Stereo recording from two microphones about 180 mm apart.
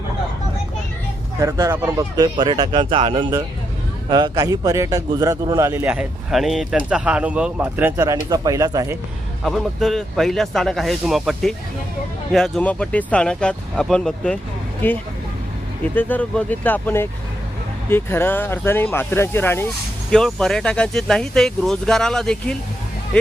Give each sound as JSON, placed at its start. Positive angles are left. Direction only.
{"t": 1.4, "sound": "a man's voice", "side_deg": -15}
{"t": 9.4, "sound": "speech", "side_deg": 0}